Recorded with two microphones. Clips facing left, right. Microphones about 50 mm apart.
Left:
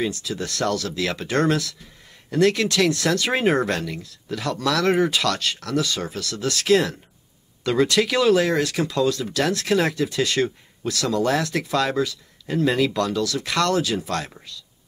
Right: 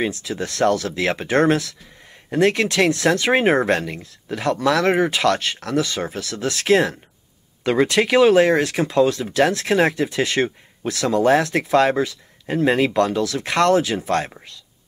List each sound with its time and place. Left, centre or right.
0.0 s speech: right